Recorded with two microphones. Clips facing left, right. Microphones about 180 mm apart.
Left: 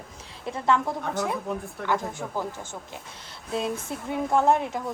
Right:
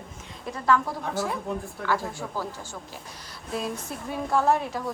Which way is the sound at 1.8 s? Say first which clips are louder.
Even; centre (ahead or behind).